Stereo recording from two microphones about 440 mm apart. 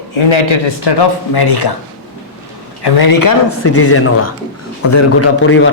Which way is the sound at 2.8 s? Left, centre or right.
Left.